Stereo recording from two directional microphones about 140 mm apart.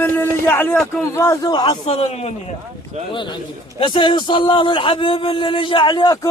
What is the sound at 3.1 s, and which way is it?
A man's voice, 35° left (ahead or behind).